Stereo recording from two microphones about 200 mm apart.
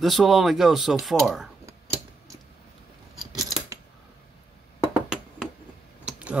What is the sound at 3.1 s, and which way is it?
Scissors, 20° right (ahead or behind).